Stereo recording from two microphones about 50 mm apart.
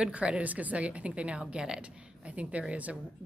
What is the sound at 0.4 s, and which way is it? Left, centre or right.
Speech, right.